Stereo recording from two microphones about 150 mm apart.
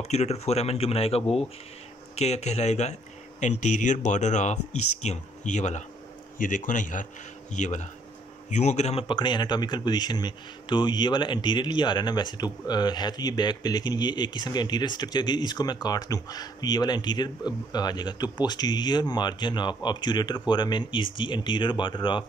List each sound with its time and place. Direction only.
0.1 s speech: 45° left (ahead or behind)
6.3 s a man's voice: 65° left (ahead or behind)
9.0 s speech: 30° left (ahead or behind)